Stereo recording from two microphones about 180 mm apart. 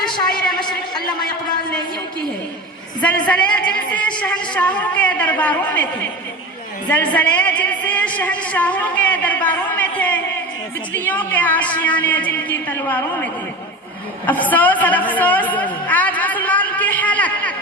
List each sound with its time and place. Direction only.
0.1 s a man's voice: 25° left (ahead or behind)
3.2 s a woman's voice: 5° left (ahead or behind)
6.9 s a woman's voice: 10° left (ahead or behind)
14.3 s a sound: 10° left (ahead or behind)